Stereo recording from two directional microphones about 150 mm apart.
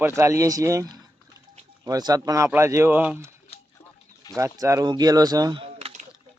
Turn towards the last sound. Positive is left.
turn(degrees=-25)  # may be behind; listen again after turning